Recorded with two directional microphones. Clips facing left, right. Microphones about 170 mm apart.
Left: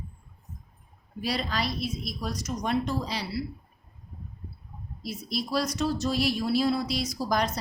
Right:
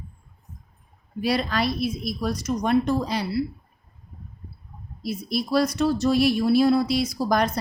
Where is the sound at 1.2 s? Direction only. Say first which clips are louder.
Right 6 dB; 60° right (ahead or behind).